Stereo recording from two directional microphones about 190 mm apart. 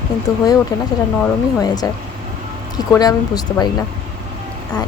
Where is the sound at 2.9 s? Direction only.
20° left (ahead or behind).